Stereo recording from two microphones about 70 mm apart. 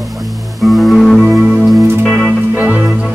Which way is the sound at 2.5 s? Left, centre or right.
Right.